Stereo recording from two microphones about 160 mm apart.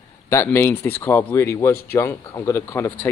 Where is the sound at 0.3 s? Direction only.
15° left (ahead or behind).